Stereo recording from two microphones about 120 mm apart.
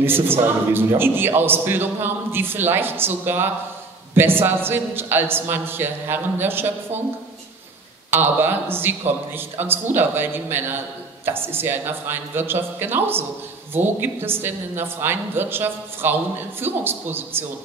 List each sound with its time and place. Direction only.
0.0 s a man's voice: 20° right (ahead or behind)
8.1 s a woman's voice: 15° right (ahead or behind)